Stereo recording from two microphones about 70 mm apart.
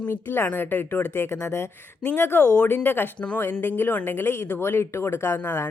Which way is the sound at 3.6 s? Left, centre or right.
Left.